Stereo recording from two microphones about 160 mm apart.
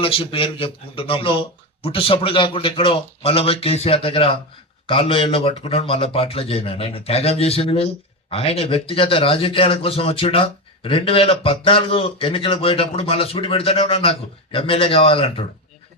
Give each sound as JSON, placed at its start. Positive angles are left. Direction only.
{"t": 0.0, "sound": "a man's voice", "side_deg": 35}